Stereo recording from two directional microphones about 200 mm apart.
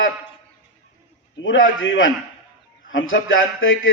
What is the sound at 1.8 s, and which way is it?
A man's voice, 75° left (ahead or behind).